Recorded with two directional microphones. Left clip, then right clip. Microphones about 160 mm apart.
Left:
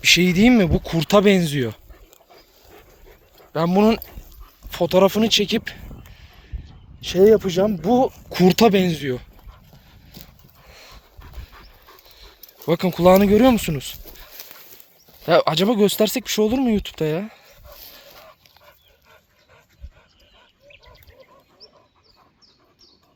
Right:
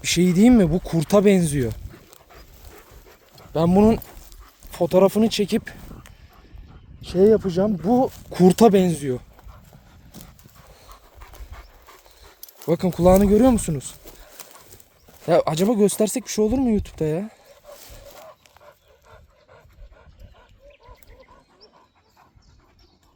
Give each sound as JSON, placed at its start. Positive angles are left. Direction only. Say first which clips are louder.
{"t": 0.0, "sound": "speech", "louder": "left 4 dB", "side_deg": -15}
{"t": 2.3, "sound": "dog", "louder": "left 1 dB", "side_deg": 10}
{"t": 3.5, "sound": "speech", "louder": "even", "side_deg": -30}
{"t": 4.0, "sound": "speech", "louder": "even", "side_deg": -5}
{"t": 7.0, "sound": "speech", "louder": "left 3 dB", "side_deg": 15}
{"t": 8.4, "sound": "speech", "louder": "right 1 dB", "side_deg": -30}
{"t": 10.1, "sound": "horse", "louder": "left 1 dB", "side_deg": -10}
{"t": 10.7, "sound": "dog", "louder": "left 5 dB", "side_deg": 5}
{"t": 12.6, "sound": "speech", "louder": "left 2 dB", "side_deg": -5}
{"t": 14.0, "sound": "a sound", "louder": "left 2 dB", "side_deg": -15}
{"t": 15.2, "sound": "speech", "louder": "left 2 dB", "side_deg": -10}
{"t": 20.7, "sound": "a sound", "louder": "left 1 dB", "side_deg": -80}